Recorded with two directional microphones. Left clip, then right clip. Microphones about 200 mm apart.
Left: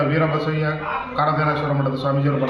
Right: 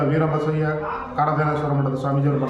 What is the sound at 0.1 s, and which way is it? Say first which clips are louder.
A man's voice: left 1 dB; 15° right (ahead or behind).